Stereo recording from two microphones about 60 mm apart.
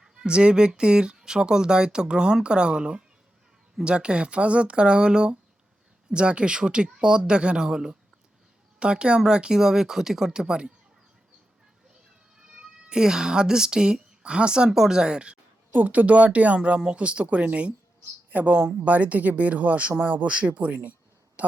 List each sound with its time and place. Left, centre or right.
0.0 s speech: centre
12.5 s speech: centre
15.7 s a woman's voice: right